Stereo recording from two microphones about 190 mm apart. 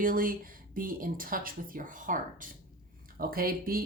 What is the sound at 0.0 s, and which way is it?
Speech, 45° right (ahead or behind).